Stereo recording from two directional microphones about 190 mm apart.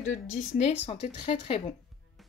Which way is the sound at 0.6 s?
35° left (ahead or behind).